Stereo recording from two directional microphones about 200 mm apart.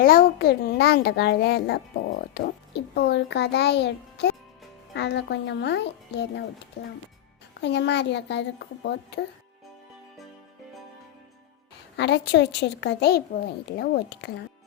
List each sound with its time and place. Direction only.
0.0 s a child's voice: 45° left (ahead or behind)
7.6 s a child's voice: 60° left (ahead or behind)
11.9 s a child's voice: 60° left (ahead or behind)